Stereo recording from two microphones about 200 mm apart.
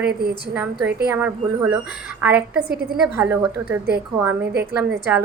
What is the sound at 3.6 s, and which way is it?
Speech, 10° right (ahead or behind).